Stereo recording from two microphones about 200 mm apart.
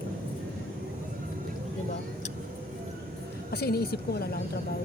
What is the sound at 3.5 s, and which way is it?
Speech, 50° left (ahead or behind).